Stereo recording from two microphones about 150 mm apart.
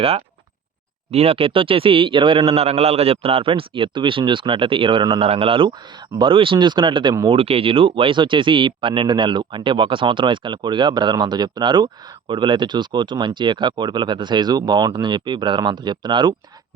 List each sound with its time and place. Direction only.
1.1 s speech: 40° right (ahead or behind)